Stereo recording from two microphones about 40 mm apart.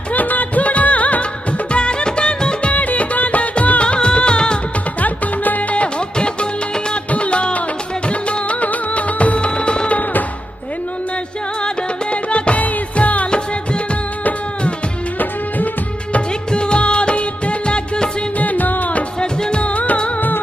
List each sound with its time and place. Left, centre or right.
0.1 s music of bollywood: left
1.7 s music: left
2.7 s music: left
5.0 s music: left
5.8 s music: left
9.6 s music: left
11.6 s music: left
15.1 s music: left
16.5 s music of bollywood: left
18.4 s music: left
19.1 s music: left
19.6 s music: left